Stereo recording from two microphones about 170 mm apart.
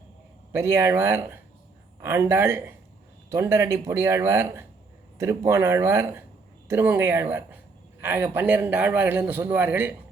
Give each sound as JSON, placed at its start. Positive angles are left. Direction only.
{"t": 0.5, "sound": "a man's voice", "side_deg": -15}